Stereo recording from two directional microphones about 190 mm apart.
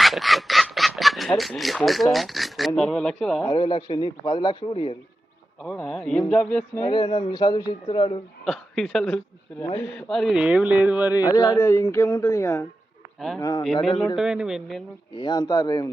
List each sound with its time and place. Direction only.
0.0 s speech: centre (ahead or behind)
3.5 s a man's voice: 25° left (ahead or behind)
5.6 s a man's voice: 5° left (ahead or behind)
6.8 s a man's voice: 25° left (ahead or behind)
8.4 s speech: centre (ahead or behind)
11.1 s a man's voice: 20° left (ahead or behind)
13.1 s speech: centre (ahead or behind)
13.4 s a man's voice: 20° left (ahead or behind)
14.2 s speech: 5° right (ahead or behind)
15.1 s a man's voice: 20° left (ahead or behind)